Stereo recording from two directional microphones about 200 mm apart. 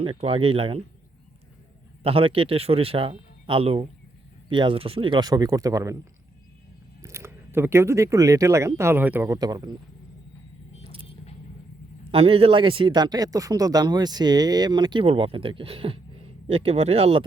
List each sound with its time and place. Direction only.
0.0 s speech: 30° right (ahead or behind)
2.0 s speech: 25° right (ahead or behind)
7.0 s speech: 15° right (ahead or behind)
12.1 s speech: 30° right (ahead or behind)